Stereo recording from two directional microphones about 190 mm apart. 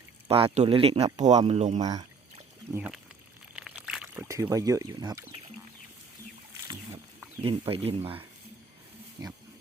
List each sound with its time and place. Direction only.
0.3 s speech: 30° right (ahead or behind)
1.8 s speech: 20° right (ahead or behind)
2.7 s speech: 10° right (ahead or behind)
7.4 s speech: 30° right (ahead or behind)